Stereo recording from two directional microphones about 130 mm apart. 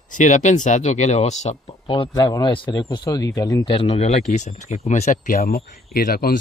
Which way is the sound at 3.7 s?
50° left (ahead or behind).